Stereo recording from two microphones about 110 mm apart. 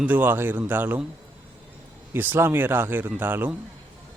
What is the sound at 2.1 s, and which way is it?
Speech, 20° right (ahead or behind).